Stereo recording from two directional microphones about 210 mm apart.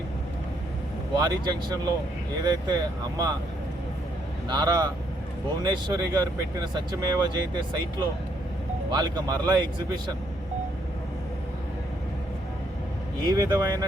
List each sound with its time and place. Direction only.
1.1 s speech: 20° right (ahead or behind)
4.4 s speech: 20° right (ahead or behind)
8.9 s speech: 20° right (ahead or behind)
13.2 s speech: 15° right (ahead or behind)